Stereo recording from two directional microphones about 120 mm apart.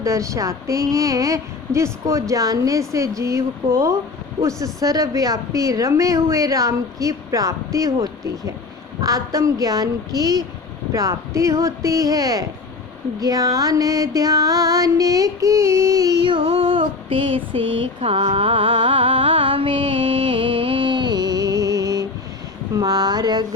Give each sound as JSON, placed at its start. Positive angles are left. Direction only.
{"t": 0.0, "sound": "music", "side_deg": -25}
{"t": 9.0, "sound": "a woman's voice", "side_deg": -30}
{"t": 10.9, "sound": "music", "side_deg": -25}
{"t": 20.0, "sound": "music", "side_deg": -55}
{"t": 22.7, "sound": "speech", "side_deg": -30}